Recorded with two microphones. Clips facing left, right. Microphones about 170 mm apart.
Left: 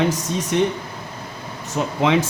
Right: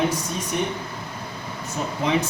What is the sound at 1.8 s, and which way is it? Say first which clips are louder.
Speech: left 5 dB; 90° left.